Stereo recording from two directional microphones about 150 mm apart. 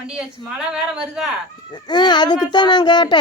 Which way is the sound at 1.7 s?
30° left (ahead or behind).